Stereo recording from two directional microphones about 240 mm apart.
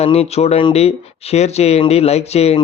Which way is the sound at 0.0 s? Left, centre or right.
Left.